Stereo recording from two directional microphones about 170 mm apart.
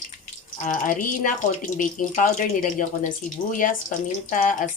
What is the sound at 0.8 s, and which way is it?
Speech, 50° left (ahead or behind).